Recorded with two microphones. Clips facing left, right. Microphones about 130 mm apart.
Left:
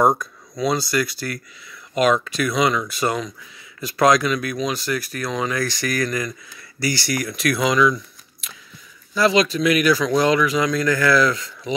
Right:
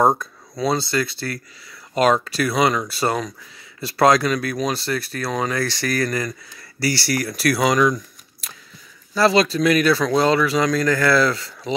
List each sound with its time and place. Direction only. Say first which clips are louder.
0.2 s speech: even; 30° right (ahead or behind)